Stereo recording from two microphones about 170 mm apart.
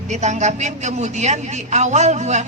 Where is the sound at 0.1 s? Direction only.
45° right (ahead or behind).